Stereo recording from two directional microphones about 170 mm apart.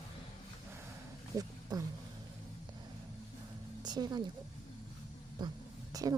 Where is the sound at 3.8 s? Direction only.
25° right (ahead or behind).